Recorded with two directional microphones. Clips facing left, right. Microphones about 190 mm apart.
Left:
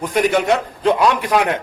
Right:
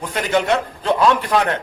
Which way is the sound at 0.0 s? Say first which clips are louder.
Left 3 dB; 10° left (ahead or behind).